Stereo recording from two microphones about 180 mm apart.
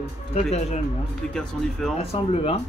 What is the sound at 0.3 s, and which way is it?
Speech, 35° left (ahead or behind).